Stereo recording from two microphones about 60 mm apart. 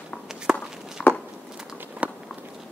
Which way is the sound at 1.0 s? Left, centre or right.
Left.